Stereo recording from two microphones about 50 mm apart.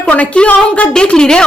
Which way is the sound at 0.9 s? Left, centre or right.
Centre.